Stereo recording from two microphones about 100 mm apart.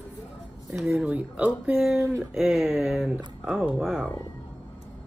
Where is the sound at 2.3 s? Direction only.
5° right (ahead or behind).